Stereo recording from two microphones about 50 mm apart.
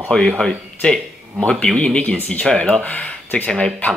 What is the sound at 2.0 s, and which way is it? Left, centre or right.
Speech, left.